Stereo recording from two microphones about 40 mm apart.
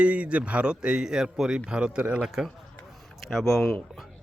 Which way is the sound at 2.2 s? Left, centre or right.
Centre.